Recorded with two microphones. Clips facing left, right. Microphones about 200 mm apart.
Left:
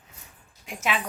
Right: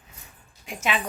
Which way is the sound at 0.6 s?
Centre (ahead or behind).